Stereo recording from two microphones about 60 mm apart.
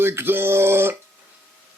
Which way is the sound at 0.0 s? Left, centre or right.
Right.